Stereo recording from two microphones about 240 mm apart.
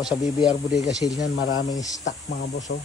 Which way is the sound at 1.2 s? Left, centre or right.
Left.